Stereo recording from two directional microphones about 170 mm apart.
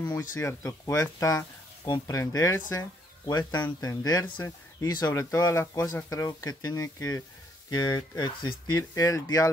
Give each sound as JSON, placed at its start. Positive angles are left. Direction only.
{"t": 0.0, "sound": "speech", "side_deg": 20}